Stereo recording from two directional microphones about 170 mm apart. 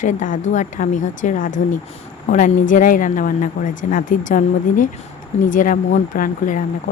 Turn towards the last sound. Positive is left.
turn(degrees=50)  # may be behind; listen again after turning